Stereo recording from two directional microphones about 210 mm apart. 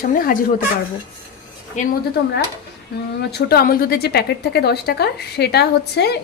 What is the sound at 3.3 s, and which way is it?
A woman's voice, 50° left (ahead or behind).